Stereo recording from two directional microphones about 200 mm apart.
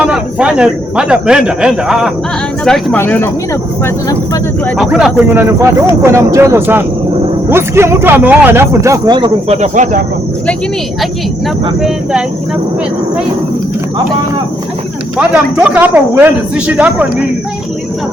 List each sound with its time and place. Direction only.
0.0 s speech: 5° right (ahead or behind); by 3.9 s 10° left (ahead or behind)
4.6 s speech: centre (ahead or behind); by 9.6 s 25° right (ahead or behind)
9.6 s speech: 40° right (ahead or behind)
15.2 s speech: 5° right (ahead or behind)